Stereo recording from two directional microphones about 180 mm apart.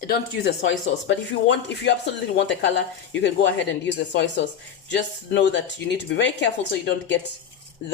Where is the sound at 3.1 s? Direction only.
80° left.